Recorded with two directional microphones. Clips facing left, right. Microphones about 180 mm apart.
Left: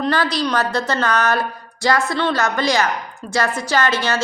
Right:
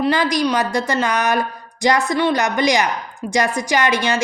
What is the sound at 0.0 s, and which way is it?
A woman's voice, 10° right (ahead or behind).